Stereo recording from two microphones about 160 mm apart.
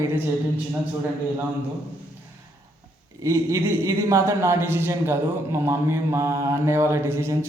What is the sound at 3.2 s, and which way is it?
A man's voice, 20° right (ahead or behind).